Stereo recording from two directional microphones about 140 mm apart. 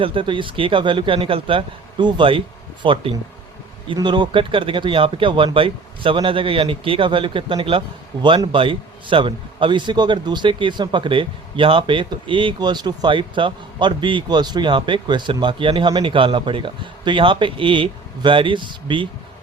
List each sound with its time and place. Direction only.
0.0 s a man's voice: 40° right (ahead or behind)